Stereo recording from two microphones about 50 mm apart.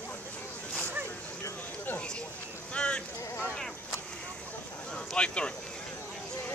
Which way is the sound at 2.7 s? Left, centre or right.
Centre.